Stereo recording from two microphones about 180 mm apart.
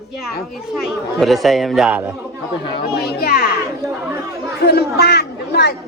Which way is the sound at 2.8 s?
60° left (ahead or behind).